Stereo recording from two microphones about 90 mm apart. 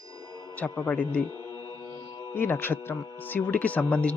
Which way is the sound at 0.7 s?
20° left (ahead or behind).